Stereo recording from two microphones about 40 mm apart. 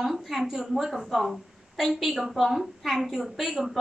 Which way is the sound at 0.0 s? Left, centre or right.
Centre.